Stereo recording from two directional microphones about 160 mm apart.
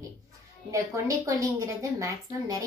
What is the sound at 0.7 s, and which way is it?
A woman's voice, 20° right (ahead or behind).